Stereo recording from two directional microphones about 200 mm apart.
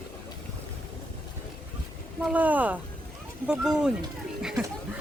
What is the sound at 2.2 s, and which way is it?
Speech, 10° right (ahead or behind).